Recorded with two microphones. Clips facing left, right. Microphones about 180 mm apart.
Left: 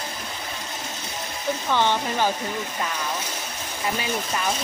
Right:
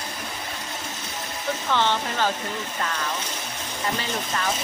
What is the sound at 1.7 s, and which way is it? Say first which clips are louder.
Speech: left 1 dB; 15° left (ahead or behind).